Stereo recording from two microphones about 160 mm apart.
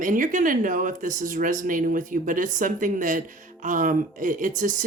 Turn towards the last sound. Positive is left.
turn(degrees=-55)  # may be behind; listen again after turning